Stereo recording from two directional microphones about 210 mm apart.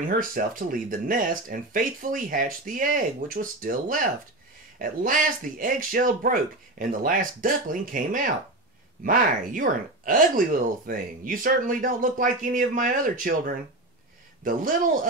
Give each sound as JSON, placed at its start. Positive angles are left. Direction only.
{"t": 0.2, "sound": "speech", "side_deg": -40}